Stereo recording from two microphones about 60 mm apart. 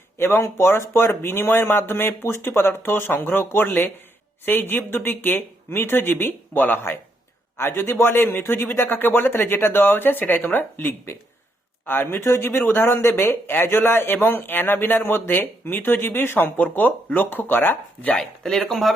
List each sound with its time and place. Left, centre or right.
0.2 s speech: left
12.2 s speech: left
18.1 s speech: centre